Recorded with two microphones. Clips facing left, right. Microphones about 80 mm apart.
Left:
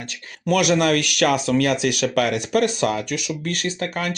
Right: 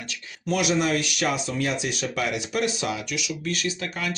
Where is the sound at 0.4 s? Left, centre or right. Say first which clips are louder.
Left 5 dB; left.